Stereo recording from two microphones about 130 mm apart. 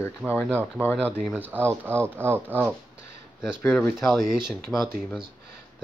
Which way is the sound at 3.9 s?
Centre (ahead or behind).